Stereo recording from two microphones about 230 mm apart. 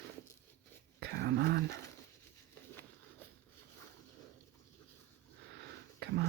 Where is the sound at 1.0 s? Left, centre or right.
Right.